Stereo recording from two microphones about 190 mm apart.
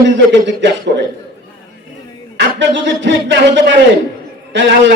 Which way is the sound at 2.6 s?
70° right (ahead or behind).